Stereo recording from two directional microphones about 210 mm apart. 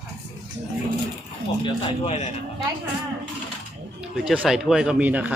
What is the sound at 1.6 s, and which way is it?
Speech, 30° left (ahead or behind).